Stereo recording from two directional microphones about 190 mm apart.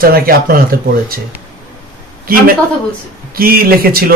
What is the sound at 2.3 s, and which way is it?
Speech, 50° right (ahead or behind).